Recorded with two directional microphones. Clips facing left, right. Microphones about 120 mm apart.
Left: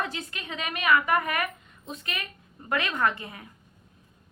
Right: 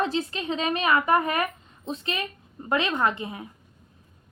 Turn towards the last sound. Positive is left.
turn(degrees=-20)  # may be behind; listen again after turning